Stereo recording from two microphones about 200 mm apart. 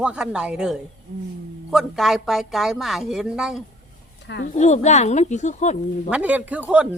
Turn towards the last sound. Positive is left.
turn(degrees=-5)  # may be behind; listen again after turning